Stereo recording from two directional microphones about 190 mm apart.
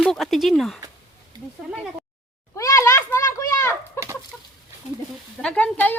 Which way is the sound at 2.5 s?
15° left (ahead or behind).